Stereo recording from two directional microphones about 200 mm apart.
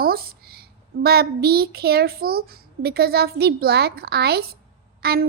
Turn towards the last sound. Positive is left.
turn(degrees=-50)  # may be behind; listen again after turning